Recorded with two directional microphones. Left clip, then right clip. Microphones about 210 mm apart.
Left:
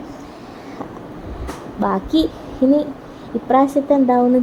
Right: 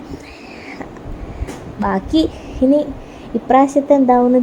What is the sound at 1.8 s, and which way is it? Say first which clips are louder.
Speech: right 1 dB; 10° right (ahead or behind).